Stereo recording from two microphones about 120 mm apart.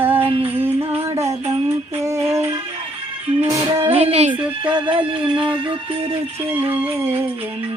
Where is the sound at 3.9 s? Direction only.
55° right (ahead or behind).